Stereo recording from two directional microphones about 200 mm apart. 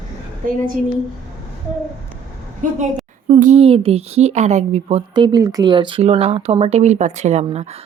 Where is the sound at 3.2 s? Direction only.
30° right (ahead or behind).